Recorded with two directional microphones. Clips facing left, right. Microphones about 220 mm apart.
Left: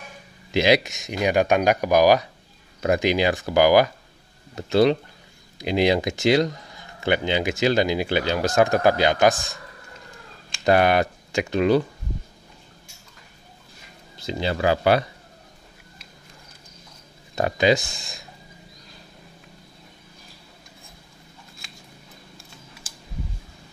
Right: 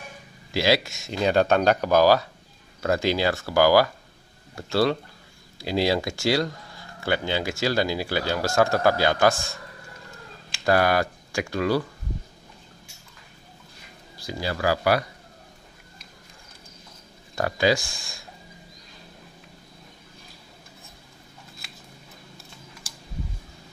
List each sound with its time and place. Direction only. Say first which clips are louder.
0.5 s speech: left 3 dB; 20° left (ahead or behind)
10.6 s speech: left 3 dB; 20° left (ahead or behind)
14.1 s speech: left 4 dB; 20° left (ahead or behind)
17.4 s speech: left 3 dB; 20° left (ahead or behind)